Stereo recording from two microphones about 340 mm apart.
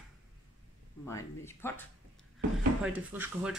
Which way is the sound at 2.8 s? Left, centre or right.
Centre.